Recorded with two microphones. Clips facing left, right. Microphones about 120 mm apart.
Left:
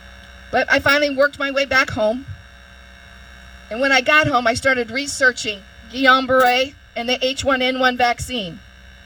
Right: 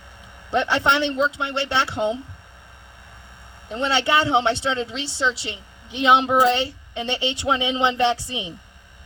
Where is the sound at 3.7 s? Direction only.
65° left (ahead or behind).